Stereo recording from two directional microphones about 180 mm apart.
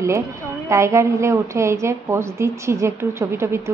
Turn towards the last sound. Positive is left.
turn(degrees=-15)  # may be behind; listen again after turning